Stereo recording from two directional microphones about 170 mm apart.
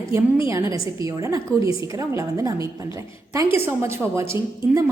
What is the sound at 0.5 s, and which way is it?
A woman's voice, 20° right (ahead or behind).